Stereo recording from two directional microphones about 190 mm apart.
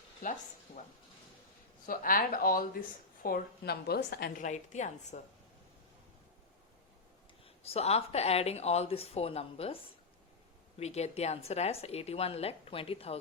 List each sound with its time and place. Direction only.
0.2 s a woman's voice: 45° left (ahead or behind)
1.9 s a woman's voice: 50° left (ahead or behind)
7.4 s a woman's voice: 30° left (ahead or behind)
10.8 s a woman's voice: 35° left (ahead or behind)